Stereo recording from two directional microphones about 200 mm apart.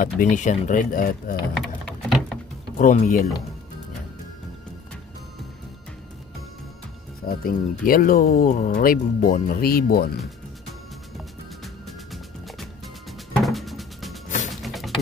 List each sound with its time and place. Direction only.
0.0 s speech: 40° left (ahead or behind)
1.6 s sewing machine: centre (ahead or behind)
2.8 s speech: 40° left (ahead or behind)
7.2 s speech: 45° left (ahead or behind)
11.6 s music: centre (ahead or behind)